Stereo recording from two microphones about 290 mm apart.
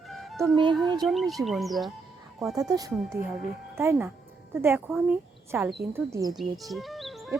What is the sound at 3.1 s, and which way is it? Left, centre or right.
Speech, right.